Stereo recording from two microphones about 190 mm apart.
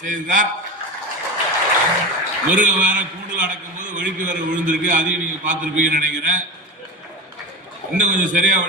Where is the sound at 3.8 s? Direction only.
40° right (ahead or behind).